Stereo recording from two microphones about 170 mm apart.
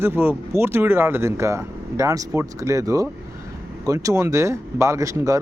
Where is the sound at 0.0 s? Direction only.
15° right (ahead or behind).